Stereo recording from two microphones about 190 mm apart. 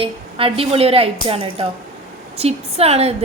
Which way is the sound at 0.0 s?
30° right (ahead or behind).